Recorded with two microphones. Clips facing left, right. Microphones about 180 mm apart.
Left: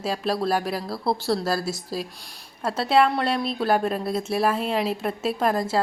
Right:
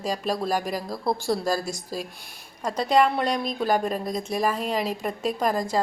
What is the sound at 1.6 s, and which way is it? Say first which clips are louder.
Speech: left 2 dB; 45° right (ahead or behind).